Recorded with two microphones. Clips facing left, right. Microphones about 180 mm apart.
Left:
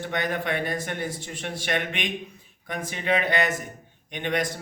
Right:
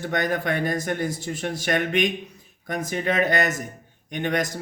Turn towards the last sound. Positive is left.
turn(degrees=-45)  # may be behind; listen again after turning